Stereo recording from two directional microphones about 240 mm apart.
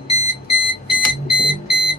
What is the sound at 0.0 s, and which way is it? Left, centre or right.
Alarm clock, left.